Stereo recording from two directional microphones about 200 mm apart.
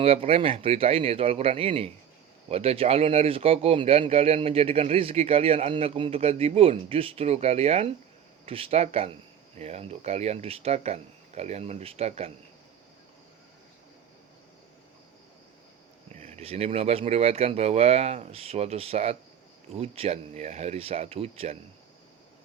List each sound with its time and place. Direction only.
0.0 s speech: 30° right (ahead or behind)
16.1 s speech: 35° right (ahead or behind)